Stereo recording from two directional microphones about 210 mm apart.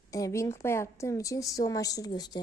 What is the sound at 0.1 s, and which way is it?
A woman's voice, 15° left (ahead or behind).